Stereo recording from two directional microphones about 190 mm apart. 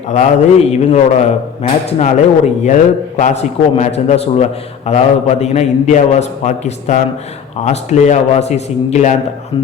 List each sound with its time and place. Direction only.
0.1 s a man's voice: 35° left (ahead or behind)